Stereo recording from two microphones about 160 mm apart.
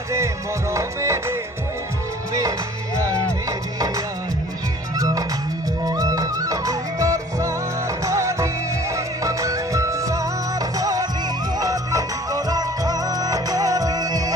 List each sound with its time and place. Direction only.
0.7 s music: 20° right (ahead or behind)